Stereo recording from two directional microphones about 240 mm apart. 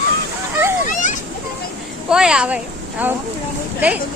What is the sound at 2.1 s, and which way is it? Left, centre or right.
Speech, centre.